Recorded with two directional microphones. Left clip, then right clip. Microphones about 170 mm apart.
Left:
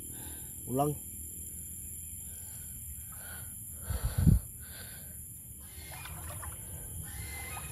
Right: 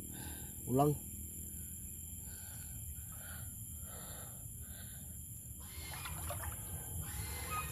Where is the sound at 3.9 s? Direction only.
60° left (ahead or behind).